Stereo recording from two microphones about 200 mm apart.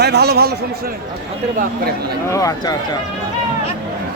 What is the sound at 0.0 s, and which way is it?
Speech, 55° right (ahead or behind).